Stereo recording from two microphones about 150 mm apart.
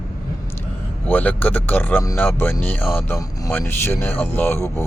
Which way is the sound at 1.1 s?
10° left (ahead or behind).